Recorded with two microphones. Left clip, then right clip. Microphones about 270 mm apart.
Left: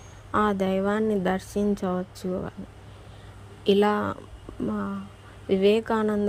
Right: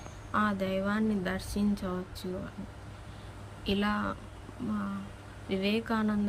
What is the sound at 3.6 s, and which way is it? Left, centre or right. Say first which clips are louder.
Speech: left 10 dB; left.